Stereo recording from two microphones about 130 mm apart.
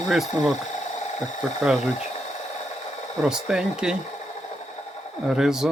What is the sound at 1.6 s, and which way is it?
Speech, 5° right (ahead or behind).